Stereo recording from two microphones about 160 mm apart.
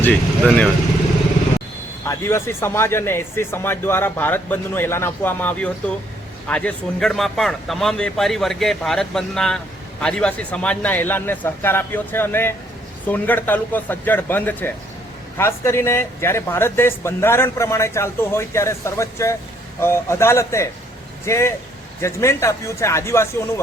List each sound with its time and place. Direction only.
0.0 s speech: 10° left (ahead or behind)
2.0 s speech: 15° left (ahead or behind)